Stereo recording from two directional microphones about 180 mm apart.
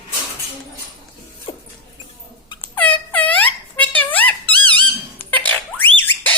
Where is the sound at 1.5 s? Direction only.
25° left (ahead or behind).